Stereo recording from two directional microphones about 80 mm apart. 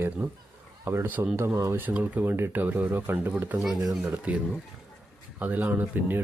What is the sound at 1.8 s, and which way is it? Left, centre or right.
Speech, right.